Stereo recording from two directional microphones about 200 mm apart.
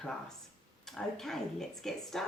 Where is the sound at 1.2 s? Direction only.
Centre (ahead or behind).